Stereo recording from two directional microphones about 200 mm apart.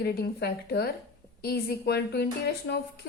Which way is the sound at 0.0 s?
50° left (ahead or behind).